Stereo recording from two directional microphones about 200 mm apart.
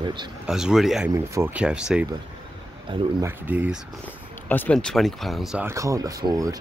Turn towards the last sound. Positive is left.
turn(degrees=-15)  # may be behind; listen again after turning